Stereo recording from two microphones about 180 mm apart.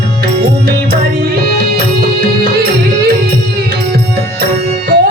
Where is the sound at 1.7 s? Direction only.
60° right (ahead or behind).